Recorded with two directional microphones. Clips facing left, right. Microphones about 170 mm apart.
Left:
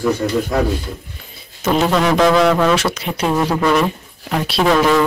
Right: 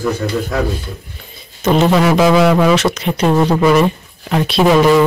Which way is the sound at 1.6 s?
5° left (ahead or behind).